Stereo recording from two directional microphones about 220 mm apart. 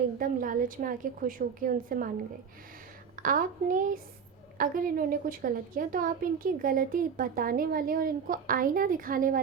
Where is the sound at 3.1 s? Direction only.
40° right (ahead or behind).